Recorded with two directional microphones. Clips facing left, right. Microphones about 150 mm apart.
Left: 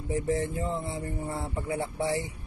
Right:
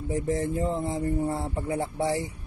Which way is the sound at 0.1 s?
40° right (ahead or behind).